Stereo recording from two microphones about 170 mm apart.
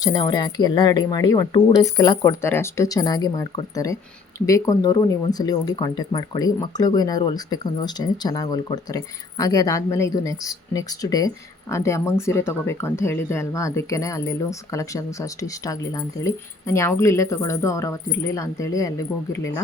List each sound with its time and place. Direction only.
0.0 s speech: 20° left (ahead or behind)